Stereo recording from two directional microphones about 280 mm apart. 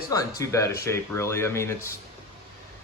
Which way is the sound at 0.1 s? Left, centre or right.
Centre.